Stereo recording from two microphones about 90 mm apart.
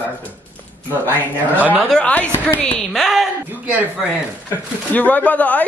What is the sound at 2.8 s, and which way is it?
Speech, 5° left (ahead or behind).